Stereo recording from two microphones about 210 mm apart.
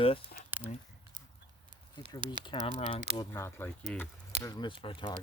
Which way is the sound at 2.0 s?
20° left (ahead or behind).